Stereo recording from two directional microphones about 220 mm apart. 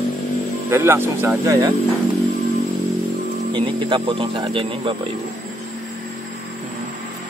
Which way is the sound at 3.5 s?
20° right (ahead or behind).